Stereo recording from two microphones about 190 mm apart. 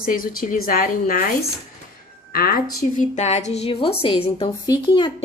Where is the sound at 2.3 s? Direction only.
50° left (ahead or behind); by 5.2 s 25° left (ahead or behind).